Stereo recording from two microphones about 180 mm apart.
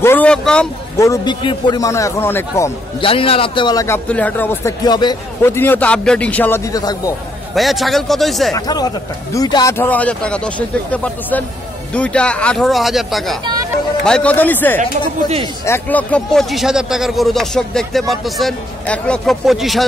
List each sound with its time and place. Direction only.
0.0 s vehicle: 10° left (ahead or behind)
0.9 s a man's voice: 15° left (ahead or behind)
3.0 s a man's voice: 30° left (ahead or behind); by 4.7 s 10° left (ahead or behind)
4.8 s a man's voice: 25° left (ahead or behind)
5.4 s a man's voice: 10° left (ahead or behind)
7.5 s speech: centre (ahead or behind)
8.5 s a man's voice: 20° left (ahead or behind)
9.8 s a man's voice: 10° left (ahead or behind)
14.8 s speech: 40° right (ahead or behind)
15.6 s speech: 10° left (ahead or behind)